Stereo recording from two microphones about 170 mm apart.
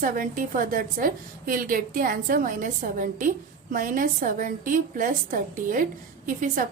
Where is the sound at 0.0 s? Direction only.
50° right (ahead or behind).